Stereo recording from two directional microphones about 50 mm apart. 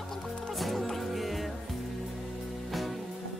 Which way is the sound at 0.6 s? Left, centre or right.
Centre.